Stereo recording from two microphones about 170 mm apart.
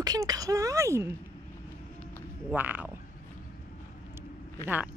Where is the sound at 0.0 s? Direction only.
20° right (ahead or behind).